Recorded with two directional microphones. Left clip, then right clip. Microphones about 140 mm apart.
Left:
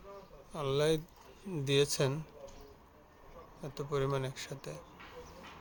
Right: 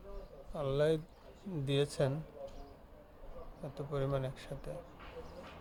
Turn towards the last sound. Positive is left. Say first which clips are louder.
# left 1 dB
turn(degrees=35)  # may be behind; listen again after turning